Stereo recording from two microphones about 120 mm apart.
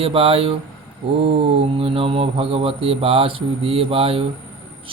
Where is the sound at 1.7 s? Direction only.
50° right (ahead or behind).